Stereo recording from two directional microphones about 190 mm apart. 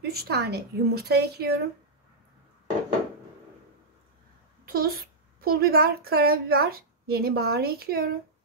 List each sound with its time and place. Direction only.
0.0 s a woman's voice: 55° right (ahead or behind)
4.6 s a child's voice: 50° right (ahead or behind)